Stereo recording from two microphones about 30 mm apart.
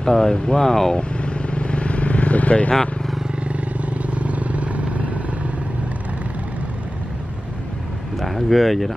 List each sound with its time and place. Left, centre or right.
0.0 s speech: centre
0.9 s vehicle: left
3.4 s vehicle: right
8.2 s speech: centre